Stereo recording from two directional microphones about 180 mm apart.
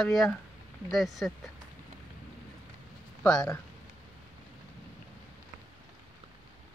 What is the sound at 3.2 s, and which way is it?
Speech, 5° left (ahead or behind).